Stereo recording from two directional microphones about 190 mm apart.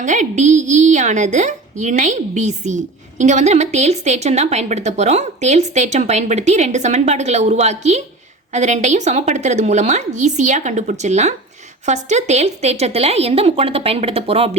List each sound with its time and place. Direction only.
0.0 s a woman's voice: 40° right (ahead or behind)